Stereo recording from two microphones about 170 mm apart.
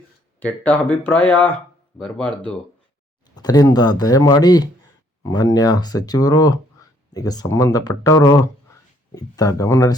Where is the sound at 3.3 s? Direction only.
25° left (ahead or behind).